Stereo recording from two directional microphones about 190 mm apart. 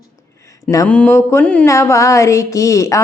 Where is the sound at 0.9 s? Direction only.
5° left (ahead or behind).